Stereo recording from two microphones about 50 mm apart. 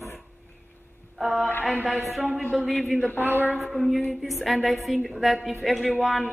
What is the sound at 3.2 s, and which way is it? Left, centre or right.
Speech, right.